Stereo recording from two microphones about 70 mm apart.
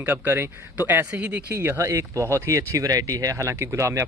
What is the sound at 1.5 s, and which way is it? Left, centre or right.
Speech, right.